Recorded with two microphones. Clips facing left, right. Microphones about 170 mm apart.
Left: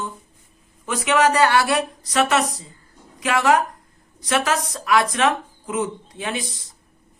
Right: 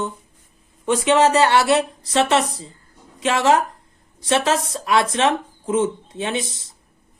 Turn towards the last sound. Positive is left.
turn(degrees=-25)  # may be behind; listen again after turning